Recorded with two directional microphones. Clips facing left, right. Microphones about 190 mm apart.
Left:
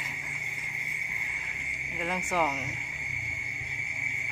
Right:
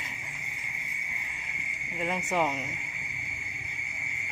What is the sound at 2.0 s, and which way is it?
Cricket, centre (ahead or behind).